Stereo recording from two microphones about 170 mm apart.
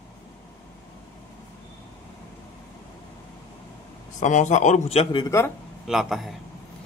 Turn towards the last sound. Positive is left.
turn(degrees=0)  # may be behind; listen again after turning